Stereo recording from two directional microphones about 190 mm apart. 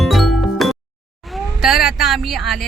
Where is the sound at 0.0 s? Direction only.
Centre (ahead or behind).